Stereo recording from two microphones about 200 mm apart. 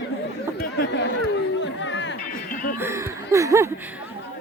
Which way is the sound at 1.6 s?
70° left (ahead or behind).